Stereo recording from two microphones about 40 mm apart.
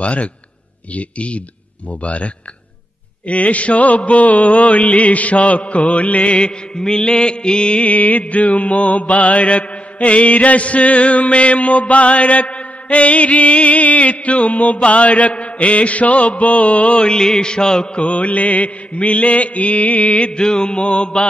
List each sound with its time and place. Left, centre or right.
0.0 s mantra: left
7.9 s mantra: left
17.0 s mantra: left
18.0 s mantra: left
20.3 s mantra: left